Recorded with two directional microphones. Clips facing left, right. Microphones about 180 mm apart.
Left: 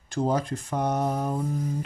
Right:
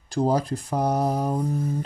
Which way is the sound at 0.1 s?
35° right (ahead or behind).